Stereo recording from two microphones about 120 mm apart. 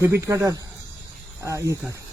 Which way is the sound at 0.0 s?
25° right (ahead or behind).